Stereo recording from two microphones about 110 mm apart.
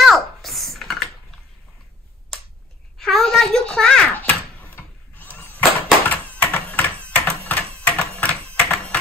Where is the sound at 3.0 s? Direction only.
5° left (ahead or behind).